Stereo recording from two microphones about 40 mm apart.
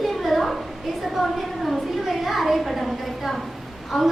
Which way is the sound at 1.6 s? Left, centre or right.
Centre.